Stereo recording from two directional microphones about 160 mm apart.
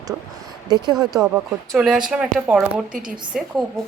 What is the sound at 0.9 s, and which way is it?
A woman's voice, 5° right (ahead or behind).